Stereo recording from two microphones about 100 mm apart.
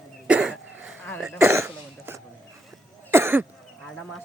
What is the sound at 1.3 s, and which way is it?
Throat clearing, 25° right (ahead or behind).